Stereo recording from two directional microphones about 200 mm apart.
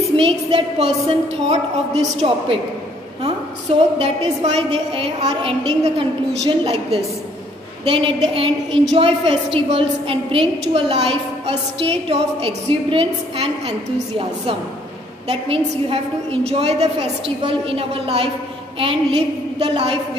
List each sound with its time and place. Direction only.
0.1 s a woman's voice: 25° right (ahead or behind)
4.0 s a woman's voice: 30° right (ahead or behind)